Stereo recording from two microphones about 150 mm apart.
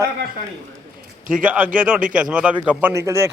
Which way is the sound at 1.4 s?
10° right (ahead or behind).